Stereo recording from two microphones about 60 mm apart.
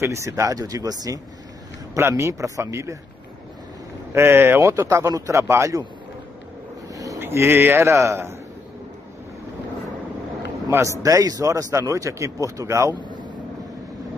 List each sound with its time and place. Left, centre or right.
0.0 s speech: right
2.0 s speech: right
2.6 s speech: right
4.1 s speech: right
6.9 s a sound: right
7.2 s speech: right
10.8 s a man's voice: right